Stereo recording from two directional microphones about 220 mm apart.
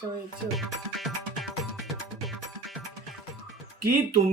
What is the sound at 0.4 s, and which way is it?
Music, centre (ahead or behind).